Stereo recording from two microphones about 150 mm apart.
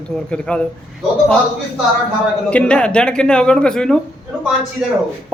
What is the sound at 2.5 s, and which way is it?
A man's voice, 5° left (ahead or behind).